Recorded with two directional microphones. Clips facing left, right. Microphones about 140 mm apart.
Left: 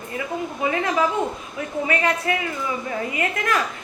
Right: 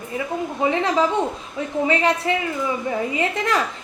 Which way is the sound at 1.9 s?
25° right (ahead or behind).